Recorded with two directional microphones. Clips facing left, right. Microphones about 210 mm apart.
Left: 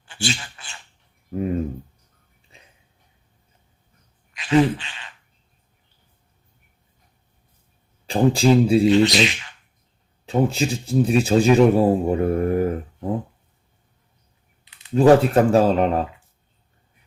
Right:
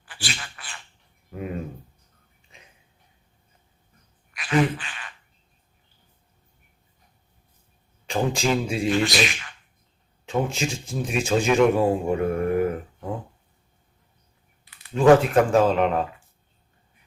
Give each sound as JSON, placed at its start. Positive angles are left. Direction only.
{"t": 0.0, "sound": "a sound", "side_deg": 25}
{"t": 2.5, "sound": "a sound", "side_deg": 35}
{"t": 4.4, "sound": "insect", "side_deg": 25}
{"t": 8.0, "sound": "a man's voice", "side_deg": 35}
{"t": 8.9, "sound": "speech", "side_deg": 20}
{"t": 10.2, "sound": "a man's voice", "side_deg": 35}
{"t": 14.6, "sound": "typing", "side_deg": 20}
{"t": 14.9, "sound": "a man's voice", "side_deg": 35}